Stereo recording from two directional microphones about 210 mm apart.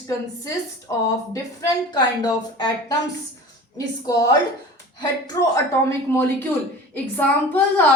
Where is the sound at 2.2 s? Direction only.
20° left (ahead or behind).